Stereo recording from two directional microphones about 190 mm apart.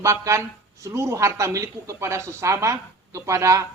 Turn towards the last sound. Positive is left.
turn(degrees=-15)  # may be behind; listen again after turning